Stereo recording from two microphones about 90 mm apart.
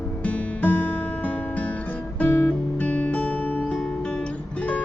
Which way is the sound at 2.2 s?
20° left (ahead or behind).